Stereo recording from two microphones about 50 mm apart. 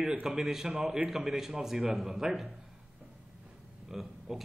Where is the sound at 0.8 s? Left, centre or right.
Right.